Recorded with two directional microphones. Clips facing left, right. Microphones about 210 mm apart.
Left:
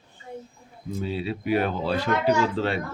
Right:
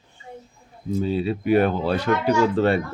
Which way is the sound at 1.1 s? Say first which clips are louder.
Right 5 dB; 45° right (ahead or behind).